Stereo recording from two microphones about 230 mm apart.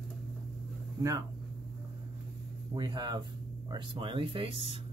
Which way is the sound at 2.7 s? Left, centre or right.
Centre.